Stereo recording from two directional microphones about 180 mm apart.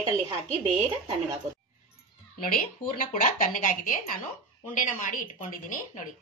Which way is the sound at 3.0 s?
50° left (ahead or behind).